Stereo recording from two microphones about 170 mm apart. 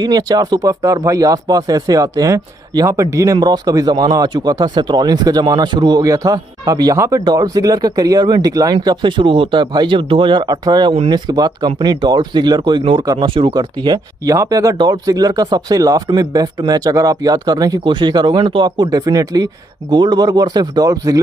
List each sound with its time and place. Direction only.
0.0 s speech: 20° right (ahead or behind)